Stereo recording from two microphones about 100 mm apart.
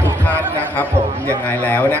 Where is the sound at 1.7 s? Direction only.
15° left (ahead or behind).